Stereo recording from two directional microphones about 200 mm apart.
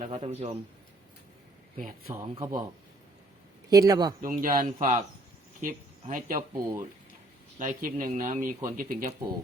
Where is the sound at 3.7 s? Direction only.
15° right (ahead or behind).